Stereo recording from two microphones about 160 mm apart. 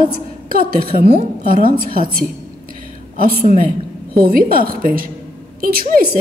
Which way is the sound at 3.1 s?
65° right (ahead or behind).